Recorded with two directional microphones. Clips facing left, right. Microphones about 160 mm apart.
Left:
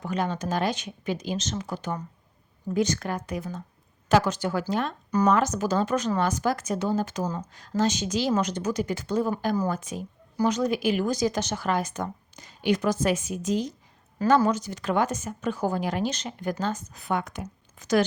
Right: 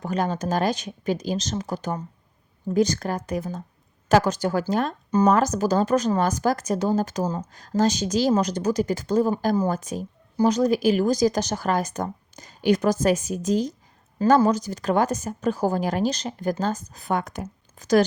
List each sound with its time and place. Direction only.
0.0 s a woman's voice: 40° right (ahead or behind)